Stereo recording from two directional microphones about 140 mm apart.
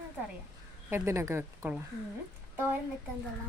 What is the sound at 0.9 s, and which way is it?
Speech, 15° right (ahead or behind).